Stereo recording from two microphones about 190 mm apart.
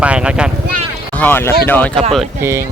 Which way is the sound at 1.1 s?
10° left (ahead or behind).